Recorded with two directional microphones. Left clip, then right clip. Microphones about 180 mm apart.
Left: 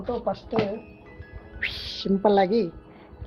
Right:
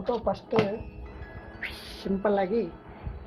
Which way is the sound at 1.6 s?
55° left (ahead or behind).